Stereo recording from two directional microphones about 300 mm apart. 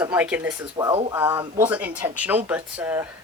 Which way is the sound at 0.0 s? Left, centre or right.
Centre.